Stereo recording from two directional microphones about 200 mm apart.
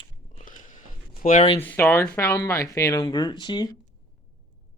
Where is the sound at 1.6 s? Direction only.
10° left (ahead or behind).